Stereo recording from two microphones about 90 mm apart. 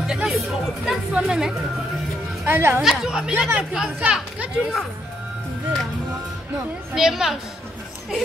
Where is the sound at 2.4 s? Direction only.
30° right (ahead or behind).